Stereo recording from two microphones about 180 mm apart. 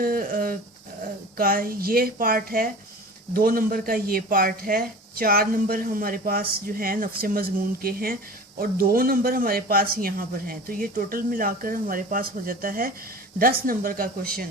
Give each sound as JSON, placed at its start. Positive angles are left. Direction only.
{"t": 0.0, "sound": "speech", "side_deg": -55}